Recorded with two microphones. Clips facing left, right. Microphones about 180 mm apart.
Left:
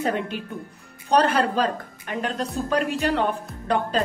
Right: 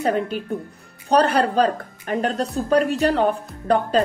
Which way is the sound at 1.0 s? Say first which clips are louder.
Right 2 dB; 40° right (ahead or behind).